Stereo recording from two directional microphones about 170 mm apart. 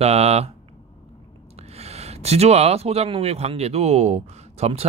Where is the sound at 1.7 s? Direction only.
40° right (ahead or behind).